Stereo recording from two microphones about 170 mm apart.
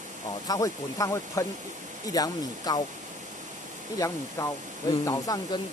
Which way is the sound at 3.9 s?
20° left (ahead or behind).